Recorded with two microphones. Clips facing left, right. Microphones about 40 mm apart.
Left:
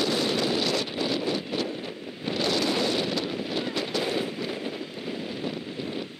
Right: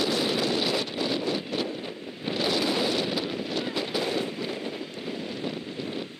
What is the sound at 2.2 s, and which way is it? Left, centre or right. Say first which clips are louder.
Wind noise: even; centre.